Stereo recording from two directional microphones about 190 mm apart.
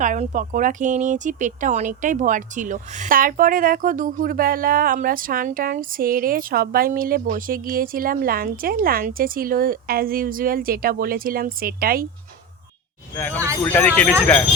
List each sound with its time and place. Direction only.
0.0 s speech: 40° right (ahead or behind)
13.1 s speech: 10° left (ahead or behind)